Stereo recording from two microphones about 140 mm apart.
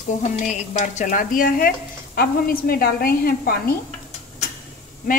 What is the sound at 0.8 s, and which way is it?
A woman's voice, 65° left (ahead or behind).